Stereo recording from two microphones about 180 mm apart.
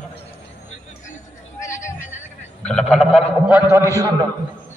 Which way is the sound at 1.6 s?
15° left (ahead or behind).